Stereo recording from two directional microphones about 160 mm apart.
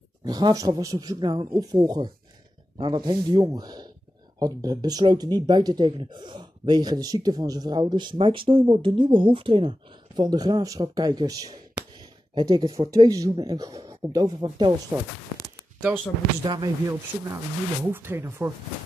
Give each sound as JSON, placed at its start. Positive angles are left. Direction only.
{"t": 0.2, "sound": "speech", "side_deg": -25}
{"t": 16.4, "sound": "speech", "side_deg": -25}
{"t": 17.9, "sound": "speech", "side_deg": -15}